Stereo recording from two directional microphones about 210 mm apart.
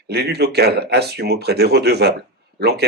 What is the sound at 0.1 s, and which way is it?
Speech, 50° right (ahead or behind).